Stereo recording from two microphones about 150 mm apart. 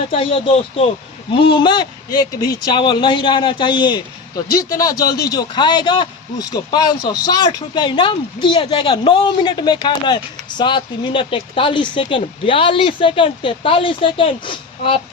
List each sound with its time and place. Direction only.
0.1 s speech: 35° left (ahead or behind)